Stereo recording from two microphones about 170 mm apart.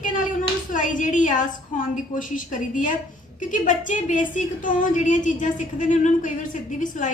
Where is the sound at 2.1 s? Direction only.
50° left (ahead or behind).